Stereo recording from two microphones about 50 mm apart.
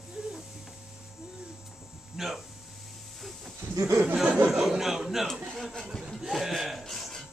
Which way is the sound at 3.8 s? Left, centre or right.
Right.